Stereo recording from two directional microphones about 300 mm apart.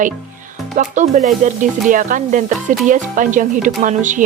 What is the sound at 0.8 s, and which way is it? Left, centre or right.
Speech, right.